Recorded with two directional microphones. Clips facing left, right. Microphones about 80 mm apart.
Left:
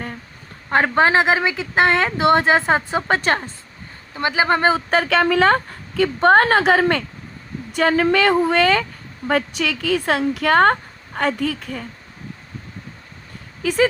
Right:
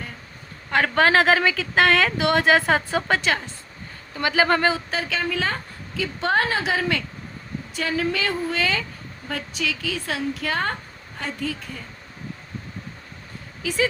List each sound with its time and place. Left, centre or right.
0.7 s speech: left
3.2 s speech: left
4.1 s speech: left
4.9 s speech: left
6.0 s a woman's voice: left
13.6 s speech: left